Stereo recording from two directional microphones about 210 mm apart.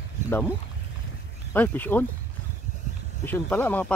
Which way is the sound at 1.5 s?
10° left (ahead or behind).